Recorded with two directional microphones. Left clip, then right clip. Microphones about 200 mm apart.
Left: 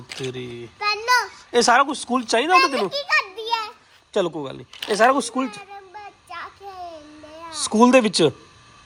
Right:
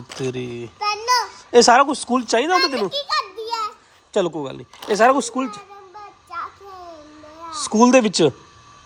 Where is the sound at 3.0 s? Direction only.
35° left (ahead or behind).